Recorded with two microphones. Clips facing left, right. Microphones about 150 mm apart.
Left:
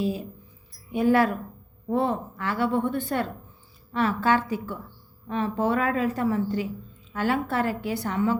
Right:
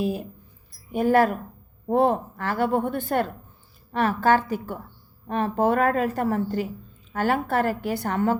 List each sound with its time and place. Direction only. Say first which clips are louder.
0.0 s a woman's voice: right 1 dB; 55° right (ahead or behind)